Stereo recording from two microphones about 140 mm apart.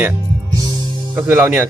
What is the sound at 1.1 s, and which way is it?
Speech, 15° right (ahead or behind).